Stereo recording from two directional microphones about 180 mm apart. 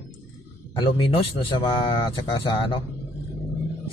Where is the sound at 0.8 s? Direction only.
30° left (ahead or behind).